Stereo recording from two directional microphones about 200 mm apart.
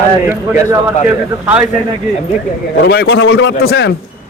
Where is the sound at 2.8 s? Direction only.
55° left (ahead or behind).